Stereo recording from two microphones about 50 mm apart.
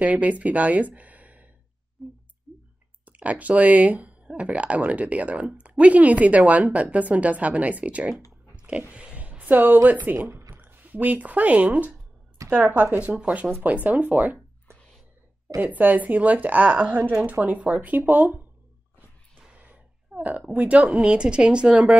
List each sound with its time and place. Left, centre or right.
0.0 s speech: right
2.0 s speech: centre
3.1 s speech: right
8.9 s a sound: right
9.8 s a woman's voice: right
13.4 s speech: centre
13.8 s a woman's voice: right
15.6 s a woman's voice: right
19.6 s a woman's voice: right